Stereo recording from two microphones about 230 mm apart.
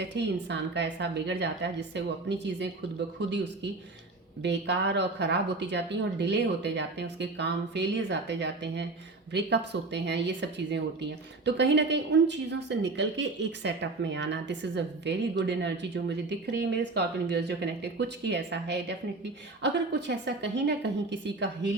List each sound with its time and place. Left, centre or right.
0.0 s speech: right